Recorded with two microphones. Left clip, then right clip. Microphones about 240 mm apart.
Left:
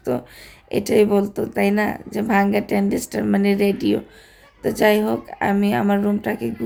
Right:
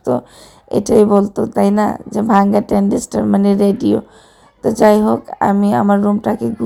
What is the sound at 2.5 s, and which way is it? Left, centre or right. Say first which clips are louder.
Speech: right 6 dB; right.